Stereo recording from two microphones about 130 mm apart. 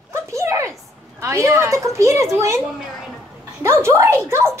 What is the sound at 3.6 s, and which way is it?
A woman's voice, 20° right (ahead or behind).